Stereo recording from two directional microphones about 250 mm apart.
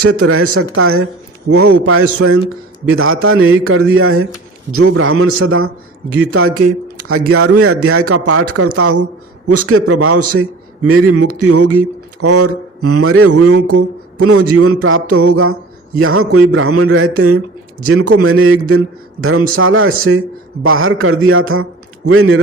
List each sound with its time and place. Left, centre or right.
0.0 s speech: right